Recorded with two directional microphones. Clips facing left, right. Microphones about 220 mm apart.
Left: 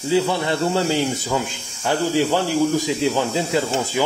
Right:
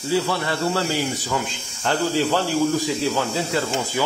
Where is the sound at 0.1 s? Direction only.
20° left (ahead or behind).